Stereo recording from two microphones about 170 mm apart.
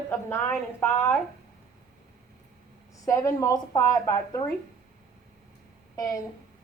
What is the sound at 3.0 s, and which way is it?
A woman's voice, 20° left (ahead or behind).